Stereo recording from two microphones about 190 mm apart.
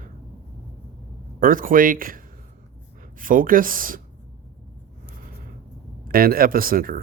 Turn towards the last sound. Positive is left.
turn(degrees=-50)  # may be behind; listen again after turning